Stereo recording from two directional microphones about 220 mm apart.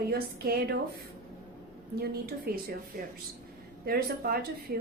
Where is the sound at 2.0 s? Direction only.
45° right (ahead or behind).